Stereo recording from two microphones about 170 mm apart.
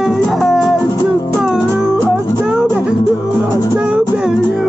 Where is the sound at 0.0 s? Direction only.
Centre (ahead or behind).